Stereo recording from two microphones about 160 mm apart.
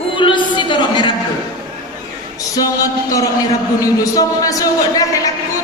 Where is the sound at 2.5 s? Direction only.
20° left (ahead or behind).